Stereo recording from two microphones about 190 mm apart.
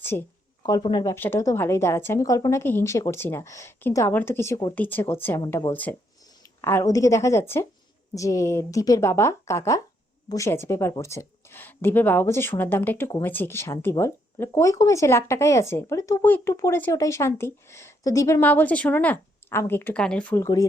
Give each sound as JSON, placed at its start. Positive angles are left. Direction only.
{"t": 0.0, "sound": "speech", "side_deg": 10}
{"t": 0.6, "sound": "speech", "side_deg": 25}